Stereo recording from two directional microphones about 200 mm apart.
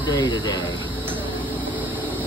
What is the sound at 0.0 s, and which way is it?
Speech, 20° left (ahead or behind).